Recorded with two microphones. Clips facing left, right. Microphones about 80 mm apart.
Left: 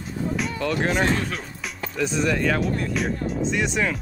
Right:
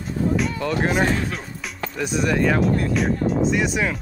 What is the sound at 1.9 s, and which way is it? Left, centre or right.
Speech, centre.